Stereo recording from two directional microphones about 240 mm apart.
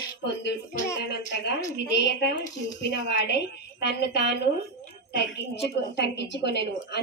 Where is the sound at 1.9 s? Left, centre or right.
Left.